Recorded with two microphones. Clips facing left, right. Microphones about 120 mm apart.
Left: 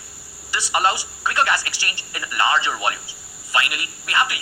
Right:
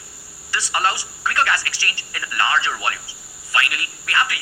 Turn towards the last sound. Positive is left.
turn(degrees=20)  # may be behind; listen again after turning